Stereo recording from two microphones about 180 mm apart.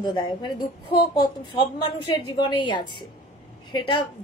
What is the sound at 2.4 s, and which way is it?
A woman's voice, 25° left (ahead or behind).